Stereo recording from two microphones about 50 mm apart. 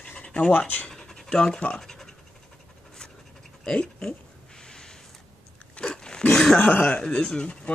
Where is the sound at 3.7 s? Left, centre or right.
Centre.